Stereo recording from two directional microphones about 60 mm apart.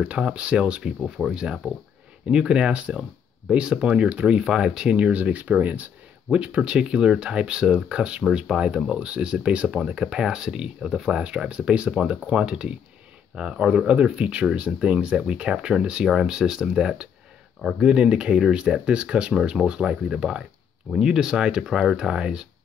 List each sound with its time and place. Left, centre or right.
0.0 s speech: centre